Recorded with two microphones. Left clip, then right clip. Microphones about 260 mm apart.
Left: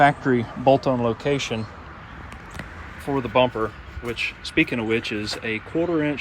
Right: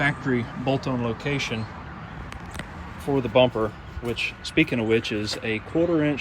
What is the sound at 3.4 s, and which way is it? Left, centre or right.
Speech, left.